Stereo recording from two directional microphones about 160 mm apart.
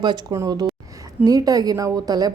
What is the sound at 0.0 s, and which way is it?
A woman's voice, 25° right (ahead or behind).